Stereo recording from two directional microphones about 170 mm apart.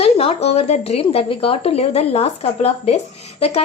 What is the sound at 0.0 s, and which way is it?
A woman's voice, 35° left (ahead or behind).